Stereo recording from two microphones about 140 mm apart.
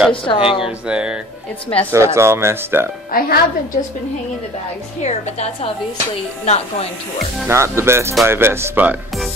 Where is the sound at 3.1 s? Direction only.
90° left.